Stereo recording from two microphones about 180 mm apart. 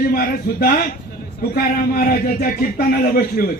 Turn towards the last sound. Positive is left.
turn(degrees=55)  # may be behind; listen again after turning